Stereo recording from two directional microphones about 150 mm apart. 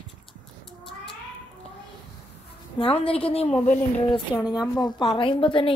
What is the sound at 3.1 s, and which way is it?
Speech, 40° left (ahead or behind).